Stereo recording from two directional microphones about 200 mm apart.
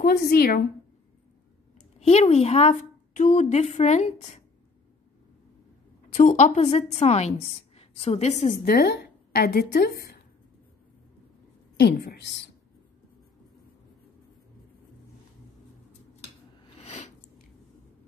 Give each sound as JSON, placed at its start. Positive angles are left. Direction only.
{"t": 0.0, "sound": "a woman's voice", "side_deg": 50}
{"t": 2.0, "sound": "a woman's voice", "side_deg": 35}
{"t": 6.1, "sound": "a woman's voice", "side_deg": 35}
{"t": 11.7, "sound": "a woman's voice", "side_deg": 55}
{"t": 16.7, "sound": "a sound", "side_deg": 35}